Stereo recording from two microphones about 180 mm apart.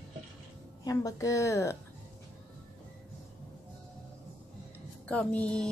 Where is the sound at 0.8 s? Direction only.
20° left (ahead or behind).